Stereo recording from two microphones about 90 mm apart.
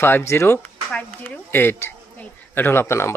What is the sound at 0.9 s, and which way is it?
Speech, 15° left (ahead or behind).